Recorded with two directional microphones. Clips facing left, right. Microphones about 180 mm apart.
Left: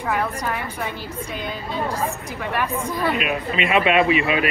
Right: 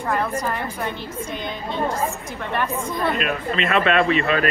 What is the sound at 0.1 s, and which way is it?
Speech, 5° left (ahead or behind).